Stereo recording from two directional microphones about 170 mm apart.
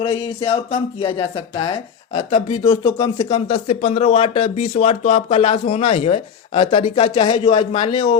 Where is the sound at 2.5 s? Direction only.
20° left (ahead or behind).